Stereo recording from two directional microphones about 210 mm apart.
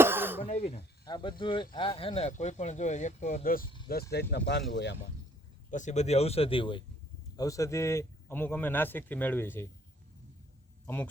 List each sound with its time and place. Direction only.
0.0 s cough: 10° right (ahead or behind)
0.4 s snake: 35° left (ahead or behind)
1.0 s speech: 20° left (ahead or behind); by 3.6 s 40° left (ahead or behind)
4.1 s speech: 50° left (ahead or behind)
5.7 s speech: 35° left (ahead or behind); by 9.6 s 10° left (ahead or behind)
10.8 s speech: 10° left (ahead or behind)